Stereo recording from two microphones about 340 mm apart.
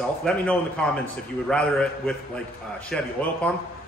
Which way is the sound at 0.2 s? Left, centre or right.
Centre.